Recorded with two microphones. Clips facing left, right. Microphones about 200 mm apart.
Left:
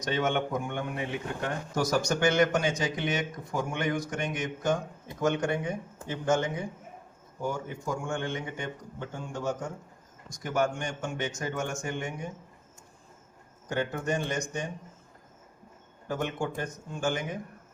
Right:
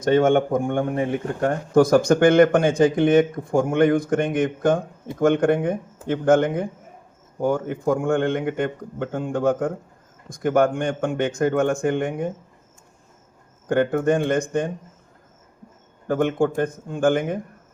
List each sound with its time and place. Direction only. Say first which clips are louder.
0.0 s a man's voice: right 11 dB; 50° right (ahead or behind)
13.7 s a man's voice: right 11 dB; 55° right (ahead or behind)
16.0 s a man's voice: right 11 dB; 55° right (ahead or behind)